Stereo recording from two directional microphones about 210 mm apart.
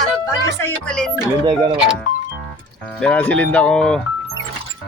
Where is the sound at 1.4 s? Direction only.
20° right (ahead or behind).